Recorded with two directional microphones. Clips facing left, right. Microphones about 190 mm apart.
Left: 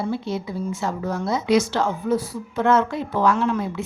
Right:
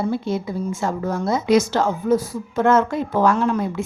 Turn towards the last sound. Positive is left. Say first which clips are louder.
# right 2 dB
turn(degrees=-45)  # may be behind; listen again after turning